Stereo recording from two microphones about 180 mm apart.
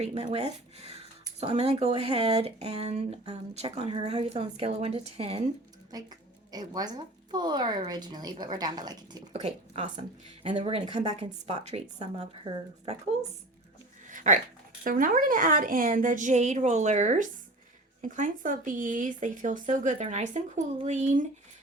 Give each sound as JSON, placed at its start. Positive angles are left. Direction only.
{"t": 0.0, "sound": "speech", "side_deg": -35}
{"t": 6.5, "sound": "a woman's voice", "side_deg": -20}
{"t": 9.3, "sound": "speech", "side_deg": -35}
{"t": 14.1, "sound": "a sound", "side_deg": -45}
{"t": 14.8, "sound": "speech", "side_deg": -50}